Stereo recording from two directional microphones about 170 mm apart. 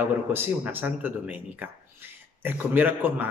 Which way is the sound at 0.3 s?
10° right (ahead or behind).